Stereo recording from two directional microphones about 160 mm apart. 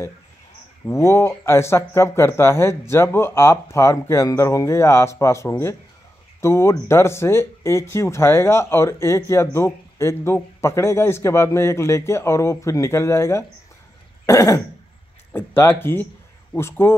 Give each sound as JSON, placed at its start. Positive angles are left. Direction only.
{"t": 0.8, "sound": "speech", "side_deg": 15}
{"t": 14.2, "sound": "throat clearing", "side_deg": 20}
{"t": 15.3, "sound": "speech", "side_deg": 15}